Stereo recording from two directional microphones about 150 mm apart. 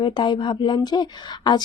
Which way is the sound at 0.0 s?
30° left (ahead or behind).